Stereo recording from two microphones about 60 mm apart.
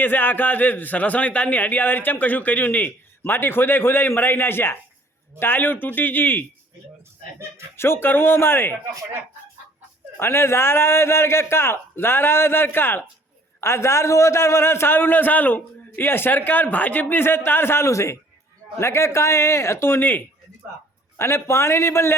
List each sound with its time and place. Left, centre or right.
0.0 s a man's voice: left
7.8 s a man's voice: left
10.2 s a man's voice: left
13.6 s a man's voice: left
21.2 s a man's voice: left